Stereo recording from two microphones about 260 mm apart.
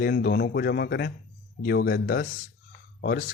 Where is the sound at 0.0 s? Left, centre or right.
Left.